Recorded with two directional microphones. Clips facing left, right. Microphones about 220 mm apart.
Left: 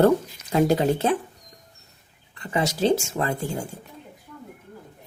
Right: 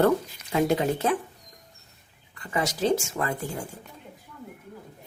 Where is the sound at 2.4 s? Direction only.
25° left (ahead or behind).